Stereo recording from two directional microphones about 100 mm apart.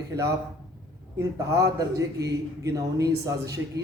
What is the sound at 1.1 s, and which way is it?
A man's voice, 35° right (ahead or behind).